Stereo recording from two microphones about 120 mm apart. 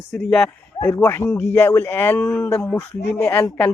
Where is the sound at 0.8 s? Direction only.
25° left (ahead or behind).